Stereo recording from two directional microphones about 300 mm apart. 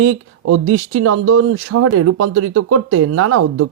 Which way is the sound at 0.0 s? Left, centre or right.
Right.